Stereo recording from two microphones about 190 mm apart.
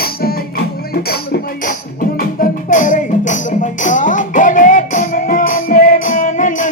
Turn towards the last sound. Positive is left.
turn(degrees=40)  # may be behind; listen again after turning